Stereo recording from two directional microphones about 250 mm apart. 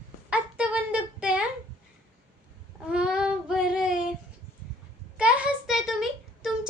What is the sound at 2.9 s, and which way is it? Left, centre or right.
A woman's voice, centre.